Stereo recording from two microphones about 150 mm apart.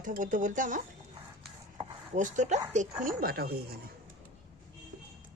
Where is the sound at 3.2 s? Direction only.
90° right.